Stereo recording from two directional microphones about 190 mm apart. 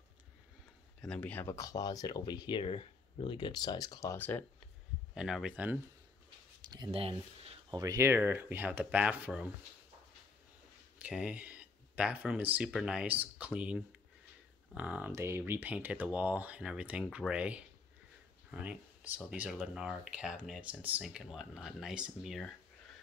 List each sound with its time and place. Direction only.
1.0 s speech: 5° left (ahead or behind)
5.1 s speech: 5° right (ahead or behind)
6.7 s speech: 25° right (ahead or behind)
7.7 s speech: 20° right (ahead or behind)
11.0 s speech: 5° right (ahead or behind)